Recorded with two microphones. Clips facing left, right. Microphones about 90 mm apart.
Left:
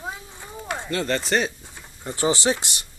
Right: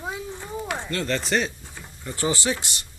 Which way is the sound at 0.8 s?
5° left (ahead or behind).